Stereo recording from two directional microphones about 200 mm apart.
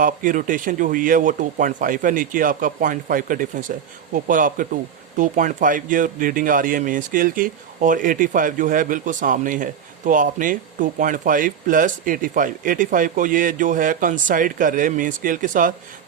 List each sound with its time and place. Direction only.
0.0 s speech: 40° right (ahead or behind)